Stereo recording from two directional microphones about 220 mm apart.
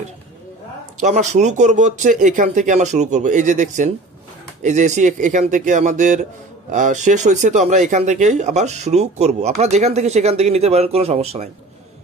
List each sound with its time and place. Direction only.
1.0 s speech: 30° right (ahead or behind)